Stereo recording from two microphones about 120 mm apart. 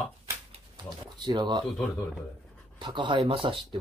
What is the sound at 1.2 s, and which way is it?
Speech, 35° right (ahead or behind).